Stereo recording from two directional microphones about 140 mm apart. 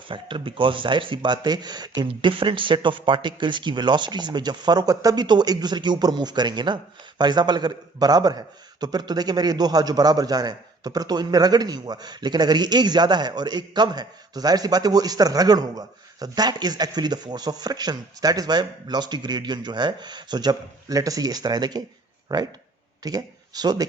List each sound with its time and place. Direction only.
0.1 s a man's voice: 35° right (ahead or behind)
23.0 s speech: 30° right (ahead or behind)